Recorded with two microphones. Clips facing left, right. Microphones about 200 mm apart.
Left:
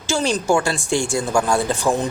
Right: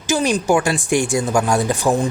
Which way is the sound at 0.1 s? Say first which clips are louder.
Right 2 dB; 15° right (ahead or behind).